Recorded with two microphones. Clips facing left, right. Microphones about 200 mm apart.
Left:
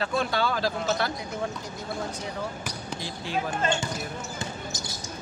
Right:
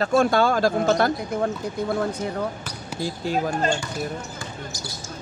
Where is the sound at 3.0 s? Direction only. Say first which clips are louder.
Right 7 dB; 40° right (ahead or behind).